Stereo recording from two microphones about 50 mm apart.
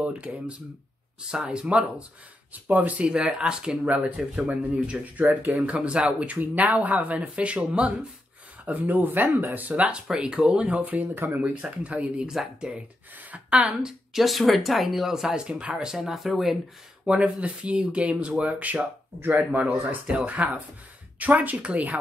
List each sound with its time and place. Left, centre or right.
0.0 s speech: right
2.5 s speech: right
3.1 s speech: centre
3.9 s speech: right
5.7 s speech: centre
8.6 s speech: right
10.1 s speech: centre
10.8 s speech: right
13.6 s speech: centre
15.3 s speech: centre
17.2 s speech: right
20.2 s speech: right